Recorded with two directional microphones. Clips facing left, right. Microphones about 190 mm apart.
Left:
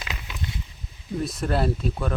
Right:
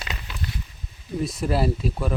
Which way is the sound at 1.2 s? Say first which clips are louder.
Right 1 dB; centre (ahead or behind).